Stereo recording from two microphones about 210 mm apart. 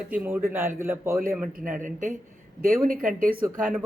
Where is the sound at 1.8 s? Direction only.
35° right (ahead or behind).